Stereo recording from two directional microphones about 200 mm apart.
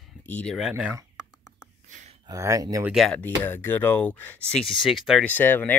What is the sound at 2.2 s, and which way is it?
Speech, 15° right (ahead or behind).